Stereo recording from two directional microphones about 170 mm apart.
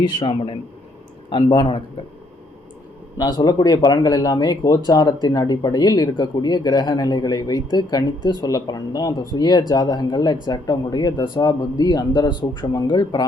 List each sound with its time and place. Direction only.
0.0 s speech: 30° left (ahead or behind)
3.2 s speech: 25° left (ahead or behind)